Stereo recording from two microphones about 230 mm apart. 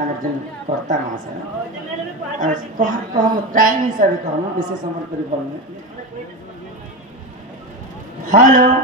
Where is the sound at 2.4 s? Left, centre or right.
Right.